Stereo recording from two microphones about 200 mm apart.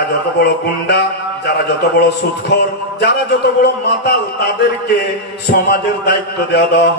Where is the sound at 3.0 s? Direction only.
55° left (ahead or behind).